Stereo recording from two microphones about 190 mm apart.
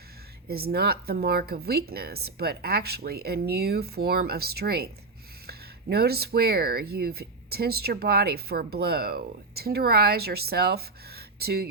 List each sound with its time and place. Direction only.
0.4 s speech: 55° right (ahead or behind)